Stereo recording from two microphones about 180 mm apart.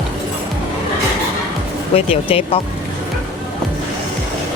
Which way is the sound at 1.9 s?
30° left (ahead or behind).